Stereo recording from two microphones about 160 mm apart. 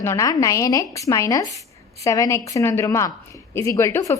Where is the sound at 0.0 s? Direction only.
20° left (ahead or behind).